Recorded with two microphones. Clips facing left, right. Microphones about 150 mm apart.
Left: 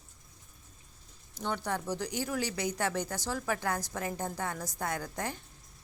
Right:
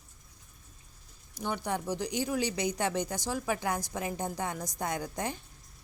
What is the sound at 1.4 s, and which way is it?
A woman's voice, 15° right (ahead or behind).